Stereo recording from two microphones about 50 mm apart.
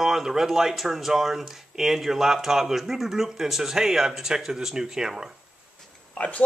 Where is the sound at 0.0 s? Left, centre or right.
Centre.